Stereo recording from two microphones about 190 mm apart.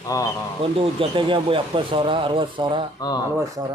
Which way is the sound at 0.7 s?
25° right (ahead or behind).